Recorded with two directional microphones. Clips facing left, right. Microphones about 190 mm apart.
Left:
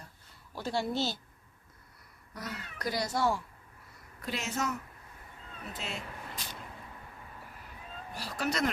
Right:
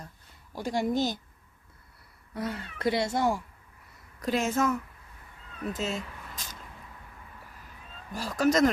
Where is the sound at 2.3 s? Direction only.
25° right (ahead or behind).